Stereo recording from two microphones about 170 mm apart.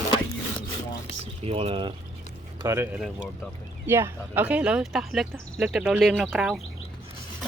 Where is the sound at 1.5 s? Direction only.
35° right (ahead or behind).